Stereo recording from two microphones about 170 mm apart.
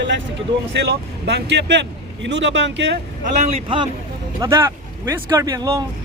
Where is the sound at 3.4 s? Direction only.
35° right (ahead or behind).